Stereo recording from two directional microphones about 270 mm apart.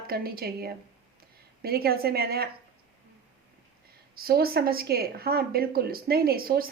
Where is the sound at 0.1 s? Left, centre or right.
Right.